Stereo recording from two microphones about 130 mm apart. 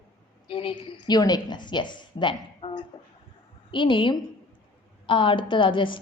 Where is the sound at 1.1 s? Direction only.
30° left (ahead or behind).